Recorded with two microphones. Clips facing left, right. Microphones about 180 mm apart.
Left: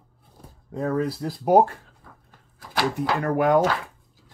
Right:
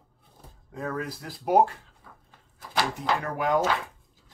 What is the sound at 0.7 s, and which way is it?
Speech, 35° left (ahead or behind).